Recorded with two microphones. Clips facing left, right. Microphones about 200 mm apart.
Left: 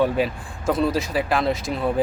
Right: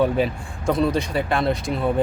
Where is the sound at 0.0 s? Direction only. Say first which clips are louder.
Right 1 dB; centre (ahead or behind).